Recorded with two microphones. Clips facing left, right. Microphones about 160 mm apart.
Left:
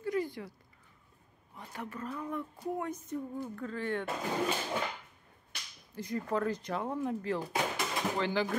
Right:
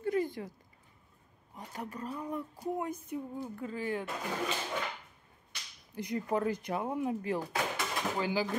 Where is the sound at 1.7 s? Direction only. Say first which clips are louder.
Even; 35° right (ahead or behind).